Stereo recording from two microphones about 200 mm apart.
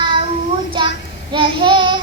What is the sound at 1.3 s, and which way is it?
Child singing, 25° right (ahead or behind).